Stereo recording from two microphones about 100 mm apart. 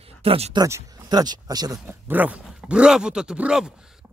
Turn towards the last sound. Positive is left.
turn(degrees=-10)  # may be behind; listen again after turning